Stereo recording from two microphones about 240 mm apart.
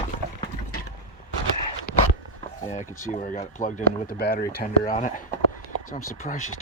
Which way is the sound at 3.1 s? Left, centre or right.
Left.